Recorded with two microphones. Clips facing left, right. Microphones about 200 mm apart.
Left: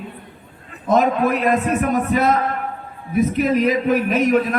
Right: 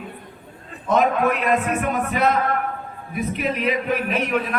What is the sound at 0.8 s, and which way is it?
A man's voice, 40° left (ahead or behind).